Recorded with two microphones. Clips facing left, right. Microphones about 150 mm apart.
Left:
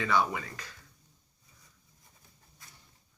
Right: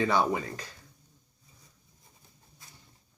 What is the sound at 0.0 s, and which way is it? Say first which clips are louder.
Speech: right 3 dB; 35° right (ahead or behind).